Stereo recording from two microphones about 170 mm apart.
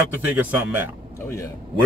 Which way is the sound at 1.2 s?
15° left (ahead or behind).